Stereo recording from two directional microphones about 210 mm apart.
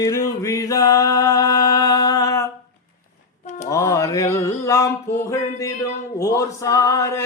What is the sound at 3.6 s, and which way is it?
Music, 15° left (ahead or behind).